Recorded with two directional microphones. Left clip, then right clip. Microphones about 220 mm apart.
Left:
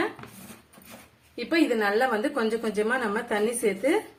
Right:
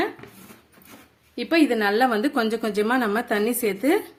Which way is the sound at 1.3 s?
40° right (ahead or behind).